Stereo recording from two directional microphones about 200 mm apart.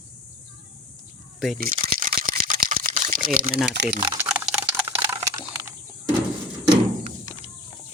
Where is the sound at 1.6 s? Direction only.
45° right (ahead or behind).